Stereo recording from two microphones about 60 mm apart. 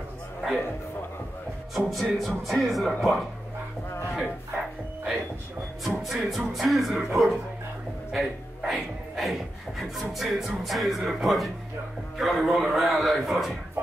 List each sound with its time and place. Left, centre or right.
1.8 s speech: centre
5.9 s speech: centre